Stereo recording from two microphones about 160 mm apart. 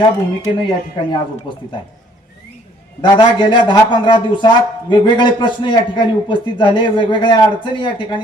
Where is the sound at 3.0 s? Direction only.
30° left (ahead or behind).